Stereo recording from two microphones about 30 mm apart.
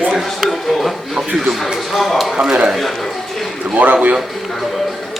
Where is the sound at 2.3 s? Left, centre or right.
Right.